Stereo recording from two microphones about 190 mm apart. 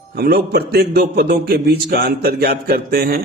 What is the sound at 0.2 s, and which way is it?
A man's voice, 55° right (ahead or behind).